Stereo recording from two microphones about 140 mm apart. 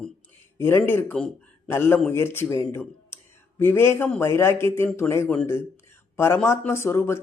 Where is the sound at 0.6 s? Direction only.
15° left (ahead or behind).